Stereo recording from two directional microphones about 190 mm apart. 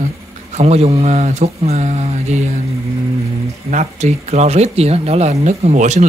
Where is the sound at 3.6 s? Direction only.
40° right (ahead or behind).